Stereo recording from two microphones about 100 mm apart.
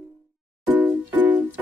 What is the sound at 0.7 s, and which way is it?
Music, 15° right (ahead or behind).